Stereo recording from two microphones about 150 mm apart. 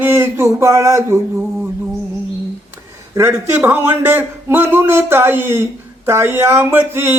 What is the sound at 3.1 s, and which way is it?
A man's voice, 15° right (ahead or behind).